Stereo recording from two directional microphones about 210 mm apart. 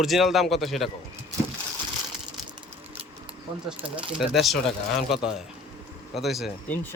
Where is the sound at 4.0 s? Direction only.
5° right (ahead or behind).